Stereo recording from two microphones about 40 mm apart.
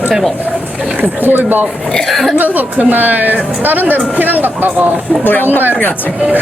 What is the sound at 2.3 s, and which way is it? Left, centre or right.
A woman's voice, right.